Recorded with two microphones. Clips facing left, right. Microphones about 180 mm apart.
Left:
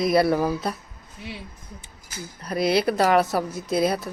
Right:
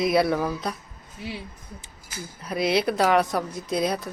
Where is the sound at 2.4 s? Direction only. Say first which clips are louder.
Left 2 dB; centre (ahead or behind).